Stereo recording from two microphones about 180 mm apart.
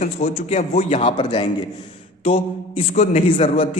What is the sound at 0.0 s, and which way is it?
A man's voice, 45° left (ahead or behind).